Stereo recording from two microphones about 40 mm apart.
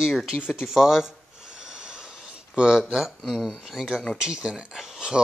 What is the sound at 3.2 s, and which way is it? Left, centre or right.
Speech, centre.